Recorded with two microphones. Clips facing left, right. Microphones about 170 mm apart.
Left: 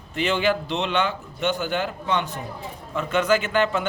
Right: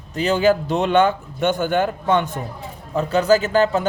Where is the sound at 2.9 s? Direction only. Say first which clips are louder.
Right 5 dB; 35° right (ahead or behind).